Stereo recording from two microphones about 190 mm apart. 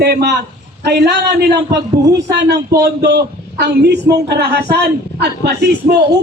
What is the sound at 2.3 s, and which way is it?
A man's voice, 60° right (ahead or behind).